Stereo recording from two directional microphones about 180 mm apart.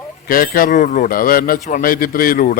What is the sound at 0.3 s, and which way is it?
A man's voice, 55° left (ahead or behind).